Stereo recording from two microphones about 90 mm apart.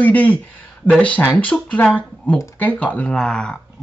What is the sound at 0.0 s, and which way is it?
Speech, 15° left (ahead or behind).